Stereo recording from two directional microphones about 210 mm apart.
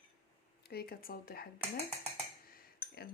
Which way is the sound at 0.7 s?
45° left (ahead or behind).